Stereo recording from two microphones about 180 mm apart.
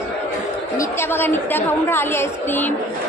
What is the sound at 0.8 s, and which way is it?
A woman's voice, 15° left (ahead or behind).